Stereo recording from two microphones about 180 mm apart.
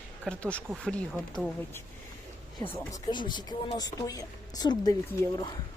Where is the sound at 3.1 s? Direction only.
25° left (ahead or behind).